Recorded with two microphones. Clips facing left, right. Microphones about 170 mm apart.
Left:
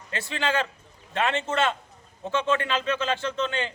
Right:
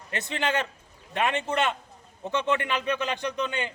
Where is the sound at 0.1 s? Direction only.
20° right (ahead or behind).